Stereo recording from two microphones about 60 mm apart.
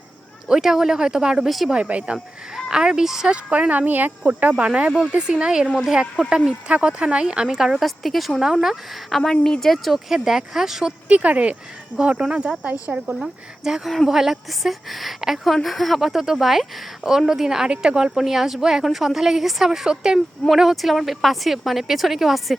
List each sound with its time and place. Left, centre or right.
0.4 s speech: centre
1.5 s speech: centre
1.7 s speech: centre
3.3 s speech: right
11.1 s speech: right; by 22.5 s centre